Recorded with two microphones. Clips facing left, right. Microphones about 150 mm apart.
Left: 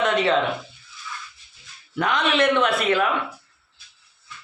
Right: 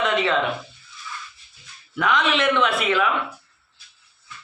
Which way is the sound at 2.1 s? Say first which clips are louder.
Left 1 dB; 35° left (ahead or behind).